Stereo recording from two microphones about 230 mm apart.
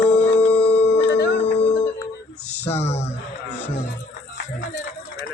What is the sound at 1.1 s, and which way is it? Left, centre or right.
Music, left.